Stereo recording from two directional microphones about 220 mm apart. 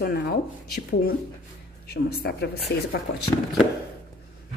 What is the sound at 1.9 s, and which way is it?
Speech, 45° left (ahead or behind).